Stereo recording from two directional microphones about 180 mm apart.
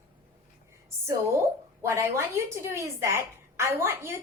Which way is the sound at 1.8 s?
15° right (ahead or behind).